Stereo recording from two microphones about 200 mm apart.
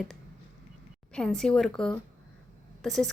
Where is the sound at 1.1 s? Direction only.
5° left (ahead or behind).